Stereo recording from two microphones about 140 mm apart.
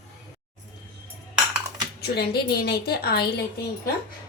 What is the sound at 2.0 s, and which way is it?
A woman's voice, 90° left.